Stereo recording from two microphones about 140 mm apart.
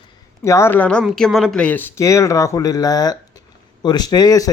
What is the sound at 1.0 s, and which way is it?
Speech, centre (ahead or behind).